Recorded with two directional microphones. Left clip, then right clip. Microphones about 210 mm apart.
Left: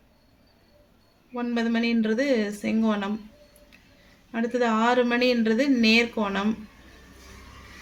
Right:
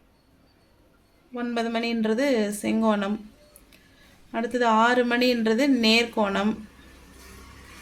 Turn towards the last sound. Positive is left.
turn(degrees=-20)  # may be behind; listen again after turning